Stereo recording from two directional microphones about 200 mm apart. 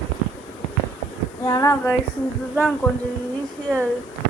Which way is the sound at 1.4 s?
15° left (ahead or behind).